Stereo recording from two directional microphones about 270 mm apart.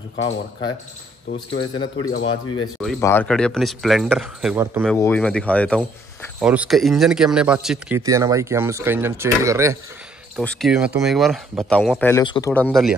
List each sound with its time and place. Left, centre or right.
1.6 s speech: centre
2.8 s speech: centre
4.9 s speech: centre
10.3 s speech: centre